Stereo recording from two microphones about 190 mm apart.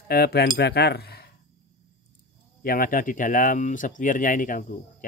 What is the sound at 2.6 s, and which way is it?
Speech, 50° left (ahead or behind).